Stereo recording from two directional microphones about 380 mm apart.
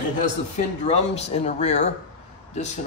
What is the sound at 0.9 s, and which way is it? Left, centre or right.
A man's voice, centre.